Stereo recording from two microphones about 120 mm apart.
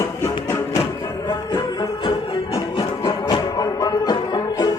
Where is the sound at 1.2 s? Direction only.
35° left (ahead or behind).